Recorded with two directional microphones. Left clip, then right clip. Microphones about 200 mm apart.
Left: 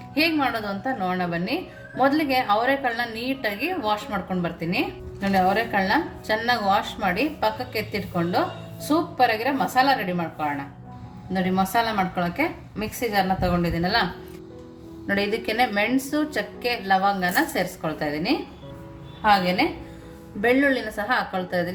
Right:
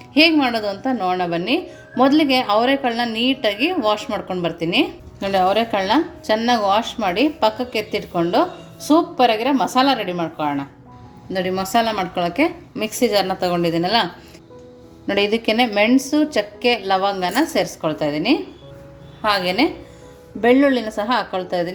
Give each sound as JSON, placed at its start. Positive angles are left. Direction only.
{"t": 0.2, "sound": "a woman's voice", "side_deg": -35}
{"t": 11.3, "sound": "a woman's voice", "side_deg": -35}
{"t": 15.0, "sound": "a woman's voice", "side_deg": -30}
{"t": 19.2, "sound": "a woman's voice", "side_deg": -45}
{"t": 20.4, "sound": "a woman's voice", "side_deg": -25}